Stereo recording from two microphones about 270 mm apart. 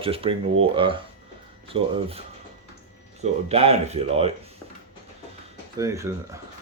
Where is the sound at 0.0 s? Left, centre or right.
Centre.